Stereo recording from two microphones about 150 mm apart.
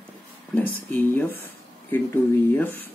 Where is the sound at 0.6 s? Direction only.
10° left (ahead or behind).